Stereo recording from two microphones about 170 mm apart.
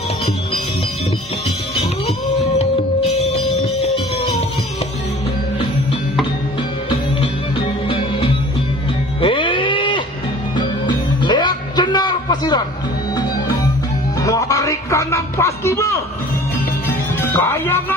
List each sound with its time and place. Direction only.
3.2 s music: 40° left (ahead or behind)
6.9 s music: 30° left (ahead or behind)
9.2 s a sound: 30° left (ahead or behind)
10.5 s music: 25° left (ahead or behind)
14.2 s music: 20° left (ahead or behind)
17.2 s music: 15° left (ahead or behind)